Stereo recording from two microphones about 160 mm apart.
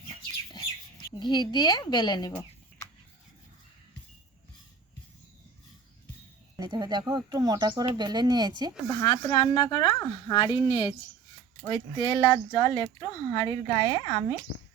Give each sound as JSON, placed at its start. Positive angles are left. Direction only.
{"t": 1.2, "sound": "speech", "side_deg": 25}
{"t": 2.3, "sound": "a sound", "side_deg": 15}
{"t": 6.6, "sound": "speech", "side_deg": -25}
{"t": 8.9, "sound": "speech", "side_deg": 25}